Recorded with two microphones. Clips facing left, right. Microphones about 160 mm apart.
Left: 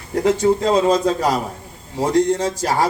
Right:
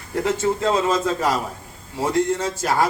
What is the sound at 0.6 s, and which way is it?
Speech, 35° left (ahead or behind).